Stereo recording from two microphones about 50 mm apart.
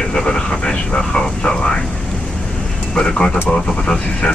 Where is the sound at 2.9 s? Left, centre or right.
Centre.